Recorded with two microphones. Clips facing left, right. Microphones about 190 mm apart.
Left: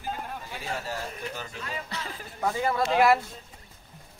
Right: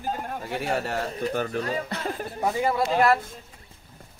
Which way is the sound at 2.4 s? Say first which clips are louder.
Right 2 dB; 15° right (ahead or behind).